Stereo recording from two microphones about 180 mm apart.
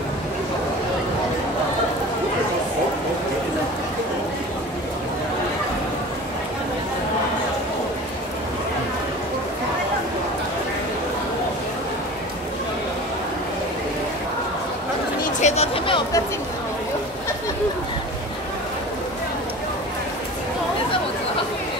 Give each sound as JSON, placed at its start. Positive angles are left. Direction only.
{"t": 15.2, "sound": "chatter", "side_deg": 40}